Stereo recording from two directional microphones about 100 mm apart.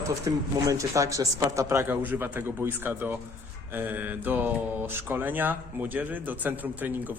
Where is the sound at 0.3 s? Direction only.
35° right (ahead or behind).